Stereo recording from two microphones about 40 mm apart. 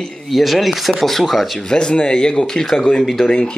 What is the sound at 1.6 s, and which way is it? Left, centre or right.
Speech, left.